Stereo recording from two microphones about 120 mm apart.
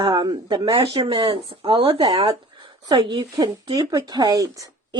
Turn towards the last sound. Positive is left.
turn(degrees=-35)  # may be behind; listen again after turning